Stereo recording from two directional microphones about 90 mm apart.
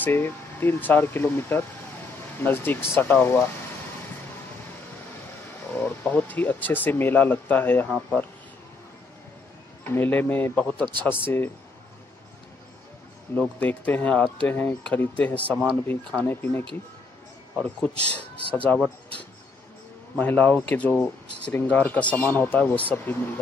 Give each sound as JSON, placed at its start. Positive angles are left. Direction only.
{"t": 0.0, "sound": "speech", "side_deg": 25}
{"t": 5.8, "sound": "speech", "side_deg": 20}
{"t": 9.8, "sound": "speech", "side_deg": 20}
{"t": 13.4, "sound": "speech", "side_deg": 15}
{"t": 17.7, "sound": "speech", "side_deg": 15}
{"t": 20.2, "sound": "speech", "side_deg": 20}